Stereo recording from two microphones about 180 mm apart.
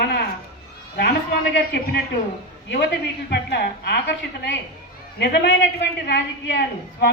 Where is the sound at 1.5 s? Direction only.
65° left (ahead or behind).